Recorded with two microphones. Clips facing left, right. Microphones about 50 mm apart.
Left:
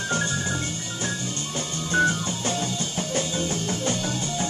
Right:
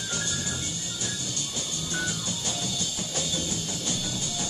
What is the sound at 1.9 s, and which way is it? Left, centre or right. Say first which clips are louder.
Music: left 11 dB; left.